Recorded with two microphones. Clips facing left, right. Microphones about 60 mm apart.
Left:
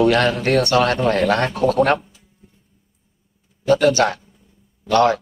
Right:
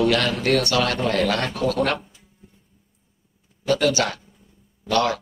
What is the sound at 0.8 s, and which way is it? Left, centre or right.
Speech, left.